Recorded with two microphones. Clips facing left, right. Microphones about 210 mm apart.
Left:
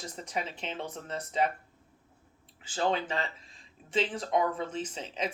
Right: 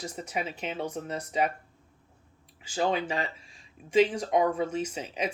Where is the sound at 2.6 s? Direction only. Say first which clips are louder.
Right 2 dB; 10° right (ahead or behind).